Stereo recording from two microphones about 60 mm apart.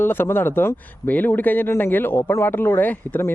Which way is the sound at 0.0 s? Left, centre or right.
Left.